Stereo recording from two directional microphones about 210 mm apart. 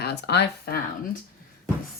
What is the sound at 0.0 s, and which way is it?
Speech, 55° left (ahead or behind).